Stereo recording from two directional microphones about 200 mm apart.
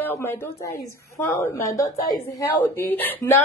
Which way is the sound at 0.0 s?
10° left (ahead or behind).